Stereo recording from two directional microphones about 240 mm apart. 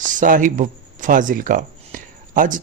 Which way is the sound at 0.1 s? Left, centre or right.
Right.